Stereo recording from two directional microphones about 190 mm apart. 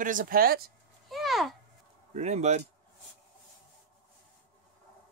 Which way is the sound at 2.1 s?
35° right (ahead or behind).